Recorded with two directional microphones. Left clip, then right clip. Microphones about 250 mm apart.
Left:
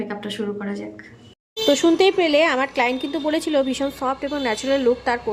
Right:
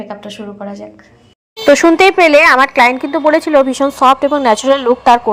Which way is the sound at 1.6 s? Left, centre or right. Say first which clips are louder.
Right 9 dB; centre.